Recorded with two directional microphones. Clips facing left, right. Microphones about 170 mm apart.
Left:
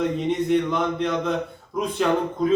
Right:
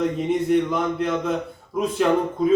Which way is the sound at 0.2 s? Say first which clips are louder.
Right 1 dB; 5° right (ahead or behind).